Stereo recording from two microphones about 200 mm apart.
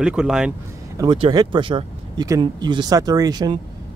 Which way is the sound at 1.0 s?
25° right (ahead or behind).